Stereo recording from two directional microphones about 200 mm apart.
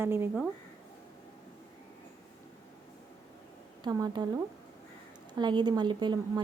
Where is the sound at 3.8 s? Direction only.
20° right (ahead or behind).